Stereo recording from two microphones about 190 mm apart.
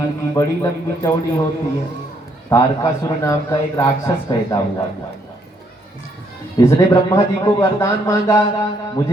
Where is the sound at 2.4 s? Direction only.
20° left (ahead or behind).